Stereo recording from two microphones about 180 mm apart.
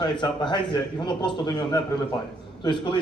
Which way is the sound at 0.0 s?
25° left (ahead or behind).